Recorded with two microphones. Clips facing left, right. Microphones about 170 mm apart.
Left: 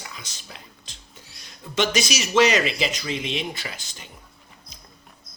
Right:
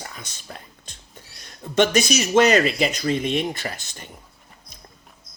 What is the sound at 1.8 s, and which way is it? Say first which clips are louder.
Speech: right 5 dB; 55° right (ahead or behind).